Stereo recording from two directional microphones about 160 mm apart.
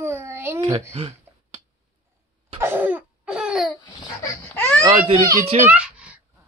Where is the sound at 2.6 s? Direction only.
10° right (ahead or behind).